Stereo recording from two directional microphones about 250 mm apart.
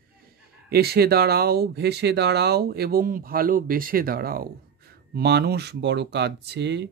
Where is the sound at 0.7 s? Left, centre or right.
Right.